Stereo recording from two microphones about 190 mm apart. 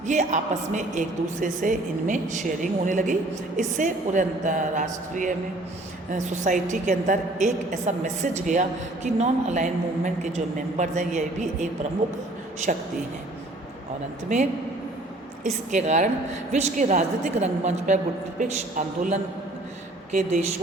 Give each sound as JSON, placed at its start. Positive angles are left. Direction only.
{"t": 0.1, "sound": "a woman's voice", "side_deg": -40}
{"t": 15.7, "sound": "a woman's voice", "side_deg": -40}